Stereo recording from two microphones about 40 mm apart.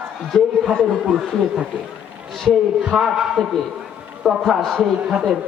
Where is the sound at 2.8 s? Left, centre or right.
Centre.